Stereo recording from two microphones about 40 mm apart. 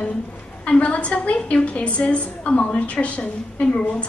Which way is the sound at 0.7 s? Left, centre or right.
Left.